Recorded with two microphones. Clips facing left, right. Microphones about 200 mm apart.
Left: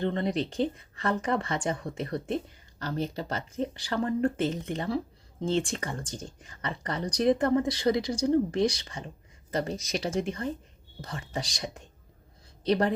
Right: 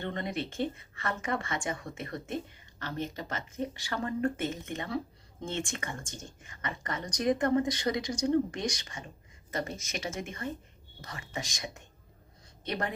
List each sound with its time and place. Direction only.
0.0 s speech: 30° left (ahead or behind)